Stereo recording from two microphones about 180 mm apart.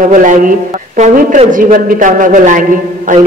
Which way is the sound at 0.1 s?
45° right (ahead or behind).